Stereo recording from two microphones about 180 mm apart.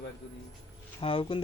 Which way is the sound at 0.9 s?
30° left (ahead or behind).